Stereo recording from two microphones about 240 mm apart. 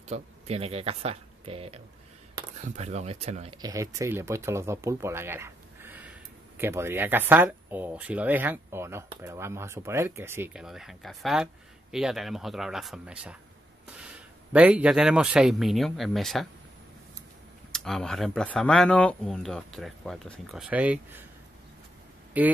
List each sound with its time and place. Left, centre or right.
0.1 s speech: right
3.6 s speech: centre
17.7 s speech: centre
22.3 s speech: centre